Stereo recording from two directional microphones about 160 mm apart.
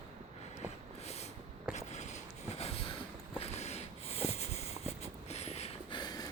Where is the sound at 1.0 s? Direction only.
40° left (ahead or behind).